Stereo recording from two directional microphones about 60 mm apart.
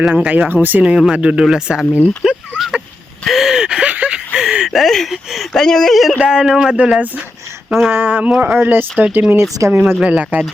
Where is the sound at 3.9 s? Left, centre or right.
Right.